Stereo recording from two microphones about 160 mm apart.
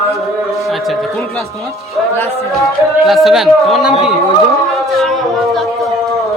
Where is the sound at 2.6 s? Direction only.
Centre (ahead or behind).